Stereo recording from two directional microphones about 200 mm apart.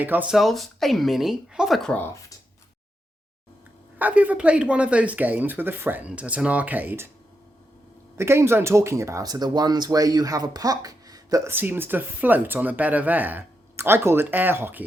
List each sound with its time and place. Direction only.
0.0 s speech: 10° right (ahead or behind)
3.9 s speech: 10° right (ahead or behind)
8.1 s speech: 15° right (ahead or behind)